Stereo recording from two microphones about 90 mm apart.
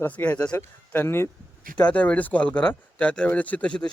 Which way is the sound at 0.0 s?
20° left (ahead or behind).